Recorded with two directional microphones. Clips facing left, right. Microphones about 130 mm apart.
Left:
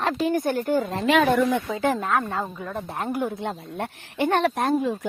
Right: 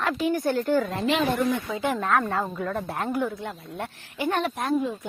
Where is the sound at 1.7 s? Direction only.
40° left (ahead or behind).